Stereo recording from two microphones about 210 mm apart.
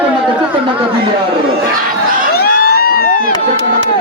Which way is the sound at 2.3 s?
45° left (ahead or behind).